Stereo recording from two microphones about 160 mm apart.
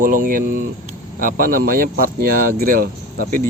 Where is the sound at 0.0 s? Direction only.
60° right (ahead or behind).